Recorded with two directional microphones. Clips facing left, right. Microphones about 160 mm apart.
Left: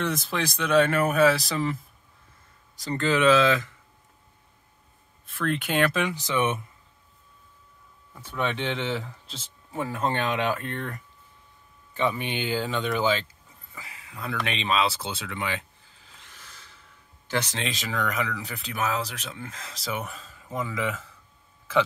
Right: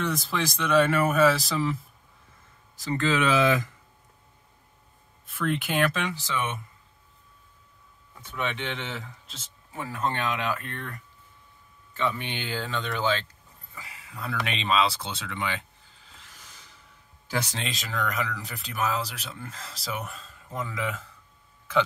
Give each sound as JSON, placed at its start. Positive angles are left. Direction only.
{"t": 0.0, "sound": "speech", "side_deg": 0}
{"t": 2.9, "sound": "speech", "side_deg": -10}
{"t": 5.3, "sound": "speech", "side_deg": -5}
{"t": 6.1, "sound": "speech", "side_deg": 20}
{"t": 8.2, "sound": "speech", "side_deg": 35}
{"t": 11.9, "sound": "speech", "side_deg": 15}
{"t": 17.3, "sound": "speech", "side_deg": -10}